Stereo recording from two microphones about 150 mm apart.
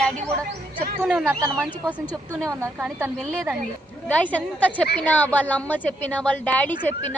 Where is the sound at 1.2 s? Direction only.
20° right (ahead or behind).